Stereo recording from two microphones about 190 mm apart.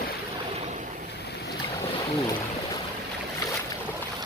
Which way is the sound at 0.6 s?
40° right (ahead or behind).